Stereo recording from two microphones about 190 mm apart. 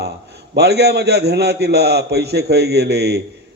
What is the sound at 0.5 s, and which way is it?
A man's voice, 60° right (ahead or behind).